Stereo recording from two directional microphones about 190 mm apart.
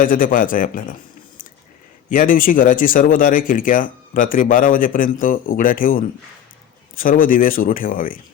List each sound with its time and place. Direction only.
0.0 s speech: 45° left (ahead or behind)
2.0 s speech: 45° left (ahead or behind)